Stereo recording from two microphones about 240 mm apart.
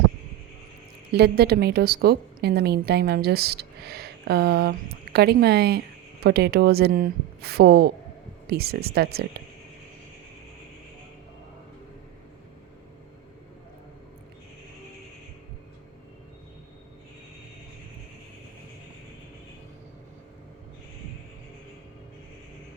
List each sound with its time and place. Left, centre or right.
1.1 s a woman's voice: right